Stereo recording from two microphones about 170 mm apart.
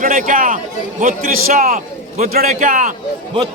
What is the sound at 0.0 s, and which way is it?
A man's voice, 55° right (ahead or behind).